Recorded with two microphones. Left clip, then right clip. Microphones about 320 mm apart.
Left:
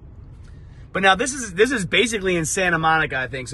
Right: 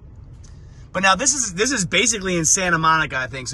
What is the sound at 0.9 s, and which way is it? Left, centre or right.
A man's voice, centre.